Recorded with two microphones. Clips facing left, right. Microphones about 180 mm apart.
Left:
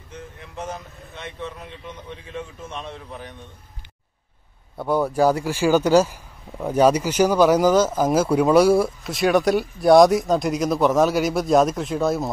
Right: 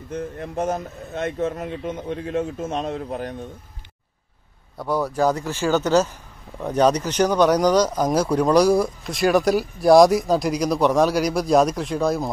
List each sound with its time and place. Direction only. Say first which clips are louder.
0.1 s speech: right 10 dB; 50° right (ahead or behind)
4.7 s speech: left 2 dB; centre (ahead or behind)